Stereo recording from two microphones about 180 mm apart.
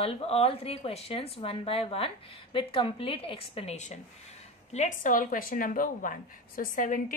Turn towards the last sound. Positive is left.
turn(degrees=45)  # may be behind; listen again after turning